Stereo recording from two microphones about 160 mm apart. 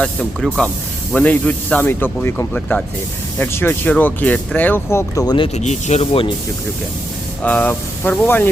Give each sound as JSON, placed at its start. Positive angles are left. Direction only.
{"t": 0.0, "sound": "speech", "side_deg": 5}
{"t": 5.5, "sound": "speech", "side_deg": 45}
{"t": 7.4, "sound": "speech", "side_deg": 10}